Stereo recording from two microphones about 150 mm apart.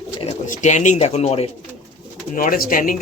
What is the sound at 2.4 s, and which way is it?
Speech, 70° left (ahead or behind).